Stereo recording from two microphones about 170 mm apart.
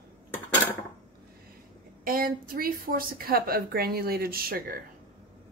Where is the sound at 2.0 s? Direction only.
60° right (ahead or behind).